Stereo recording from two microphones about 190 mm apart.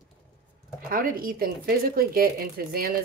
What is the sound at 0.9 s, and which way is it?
Speech, 50° right (ahead or behind).